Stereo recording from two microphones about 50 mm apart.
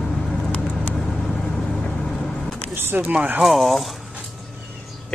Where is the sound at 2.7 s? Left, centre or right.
Right.